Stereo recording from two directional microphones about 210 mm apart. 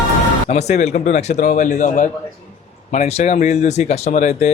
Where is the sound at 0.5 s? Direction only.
35° left (ahead or behind).